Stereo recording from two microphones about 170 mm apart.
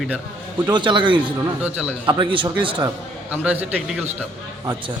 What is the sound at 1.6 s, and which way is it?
Speech, 10° right (ahead or behind).